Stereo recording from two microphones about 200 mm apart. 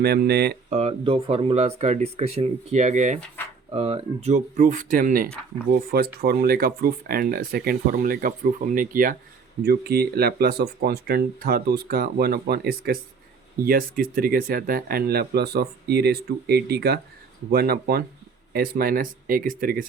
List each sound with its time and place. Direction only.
0.0 s speech: 50° right (ahead or behind)
0.7 s speech: 30° right (ahead or behind)